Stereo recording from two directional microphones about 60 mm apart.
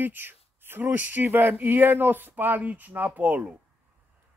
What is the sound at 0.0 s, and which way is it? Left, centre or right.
Speech, right.